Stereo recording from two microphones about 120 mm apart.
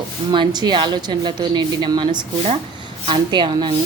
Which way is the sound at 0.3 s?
35° right (ahead or behind).